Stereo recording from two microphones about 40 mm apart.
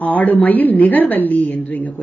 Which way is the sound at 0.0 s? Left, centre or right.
Left.